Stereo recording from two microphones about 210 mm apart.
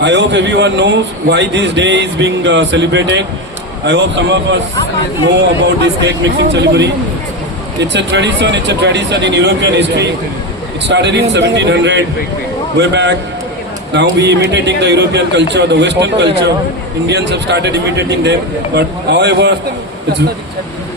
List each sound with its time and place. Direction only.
0.0 s speech: 55° right (ahead or behind)
6.0 s a man's voice: 55° right (ahead or behind)